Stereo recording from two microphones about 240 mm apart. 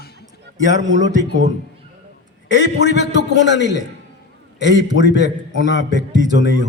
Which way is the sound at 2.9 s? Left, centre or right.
Right.